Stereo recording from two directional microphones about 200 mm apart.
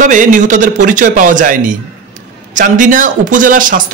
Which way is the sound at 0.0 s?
40° right (ahead or behind).